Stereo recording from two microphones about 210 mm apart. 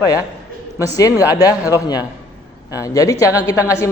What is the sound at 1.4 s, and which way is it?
Speech, 15° left (ahead or behind).